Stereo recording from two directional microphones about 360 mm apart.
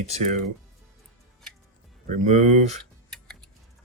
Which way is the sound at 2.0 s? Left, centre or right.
Centre.